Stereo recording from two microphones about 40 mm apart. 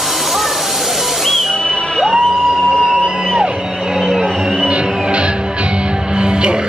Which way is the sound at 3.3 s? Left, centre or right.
Centre.